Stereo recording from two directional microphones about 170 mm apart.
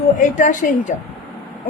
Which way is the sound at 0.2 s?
50° left (ahead or behind).